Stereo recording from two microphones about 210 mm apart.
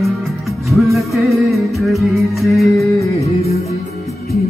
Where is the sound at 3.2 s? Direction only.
30° left (ahead or behind).